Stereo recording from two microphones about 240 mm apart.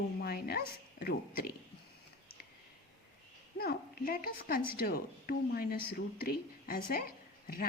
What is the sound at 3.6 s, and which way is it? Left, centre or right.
A woman's voice, left.